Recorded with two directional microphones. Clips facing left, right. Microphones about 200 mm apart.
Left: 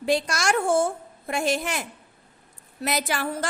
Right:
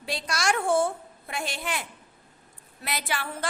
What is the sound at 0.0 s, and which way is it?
A woman's voice, 50° left (ahead or behind).